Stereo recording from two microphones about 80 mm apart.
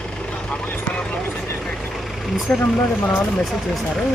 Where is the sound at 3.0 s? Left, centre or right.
Centre.